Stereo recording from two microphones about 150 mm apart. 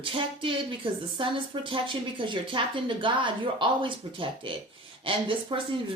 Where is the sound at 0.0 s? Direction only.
35° right (ahead or behind).